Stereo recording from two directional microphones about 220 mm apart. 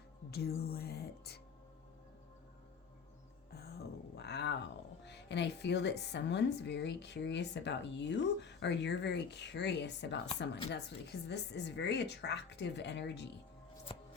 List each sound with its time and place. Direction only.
0.3 s music: 45° left (ahead or behind)
3.5 s speech: 45° left (ahead or behind)